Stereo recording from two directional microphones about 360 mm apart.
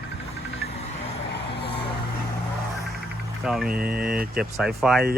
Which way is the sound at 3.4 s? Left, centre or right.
Centre.